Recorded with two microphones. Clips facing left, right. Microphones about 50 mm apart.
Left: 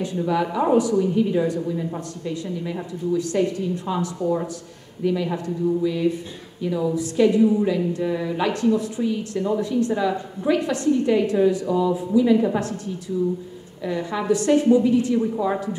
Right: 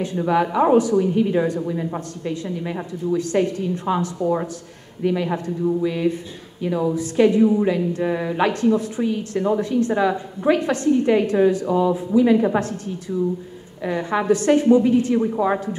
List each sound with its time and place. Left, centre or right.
0.0 s a woman's voice: right
13.8 s a woman's voice: right